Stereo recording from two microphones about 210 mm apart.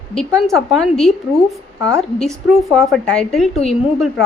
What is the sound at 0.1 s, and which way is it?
A woman's voice, 5° left (ahead or behind).